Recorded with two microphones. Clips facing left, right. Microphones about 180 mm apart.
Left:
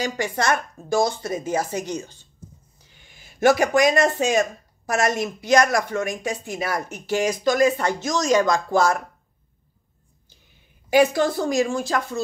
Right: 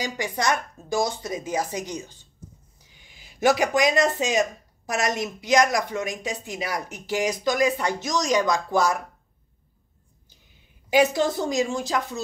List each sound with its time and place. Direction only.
0.0 s speech: 15° right (ahead or behind)
2.8 s a sound: 15° right (ahead or behind)
3.3 s speech: 55° left (ahead or behind)
3.6 s speech: 20° right (ahead or behind)
10.9 s a woman's voice: 20° right (ahead or behind)